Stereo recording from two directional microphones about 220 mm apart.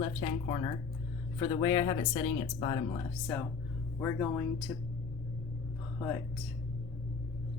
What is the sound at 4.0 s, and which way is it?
Speech, 10° left (ahead or behind).